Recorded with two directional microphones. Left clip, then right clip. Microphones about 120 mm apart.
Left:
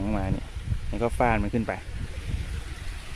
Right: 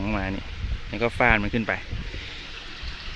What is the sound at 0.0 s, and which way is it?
Speech, 5° left (ahead or behind).